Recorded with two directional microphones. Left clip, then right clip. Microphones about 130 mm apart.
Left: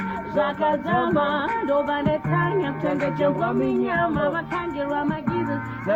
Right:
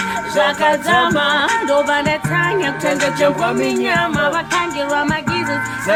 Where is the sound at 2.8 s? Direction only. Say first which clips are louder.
Right 8 dB; 30° right (ahead or behind).